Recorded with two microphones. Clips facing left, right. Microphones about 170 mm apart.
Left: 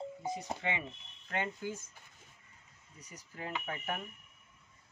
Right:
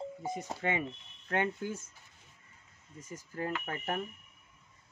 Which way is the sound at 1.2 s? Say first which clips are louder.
Right 4 dB; 55° right (ahead or behind).